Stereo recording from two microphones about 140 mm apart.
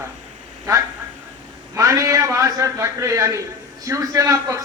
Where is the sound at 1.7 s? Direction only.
25° right (ahead or behind).